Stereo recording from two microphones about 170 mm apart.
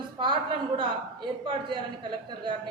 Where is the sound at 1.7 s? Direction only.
30° right (ahead or behind).